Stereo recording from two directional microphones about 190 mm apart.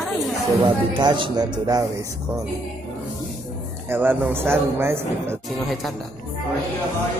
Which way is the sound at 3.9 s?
10° right (ahead or behind).